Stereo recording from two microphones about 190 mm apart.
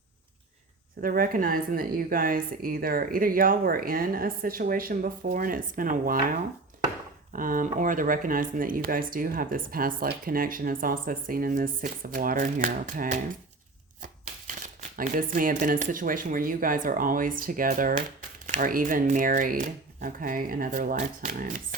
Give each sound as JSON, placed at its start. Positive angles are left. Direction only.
{"t": 1.0, "sound": "speech", "side_deg": -50}
{"t": 7.3, "sound": "speech", "side_deg": -45}